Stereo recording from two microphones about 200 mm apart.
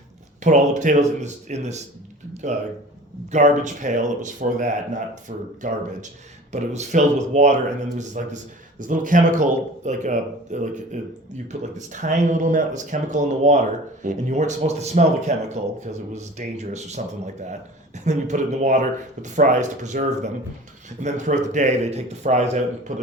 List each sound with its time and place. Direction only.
0.4 s speech: 35° right (ahead or behind)
18.0 s speech: 35° right (ahead or behind)